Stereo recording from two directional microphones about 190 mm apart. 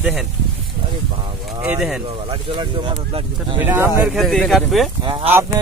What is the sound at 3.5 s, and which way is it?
Speech, 10° right (ahead or behind).